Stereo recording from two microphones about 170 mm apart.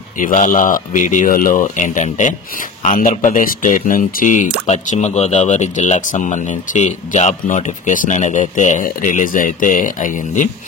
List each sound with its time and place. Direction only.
0.2 s speech: 50° left (ahead or behind)